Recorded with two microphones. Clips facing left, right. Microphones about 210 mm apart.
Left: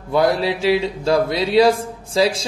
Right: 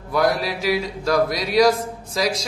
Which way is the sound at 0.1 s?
30° left (ahead or behind).